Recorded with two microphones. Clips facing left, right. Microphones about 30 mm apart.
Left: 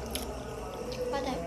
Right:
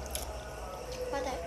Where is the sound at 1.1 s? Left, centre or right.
Left.